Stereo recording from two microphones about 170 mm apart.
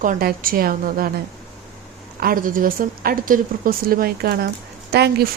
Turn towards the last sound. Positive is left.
turn(degrees=-70)  # may be behind; listen again after turning